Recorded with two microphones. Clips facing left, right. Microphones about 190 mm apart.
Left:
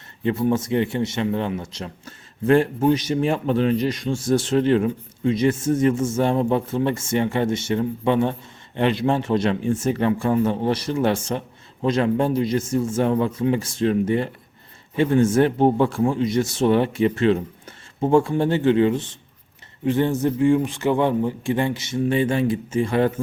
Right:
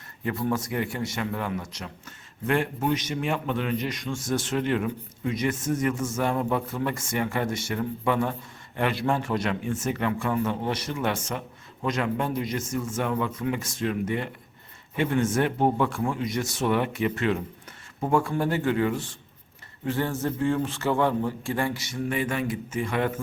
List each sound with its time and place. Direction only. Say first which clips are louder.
0.2 s a man's voice: left 7 dB; 25° left (ahead or behind)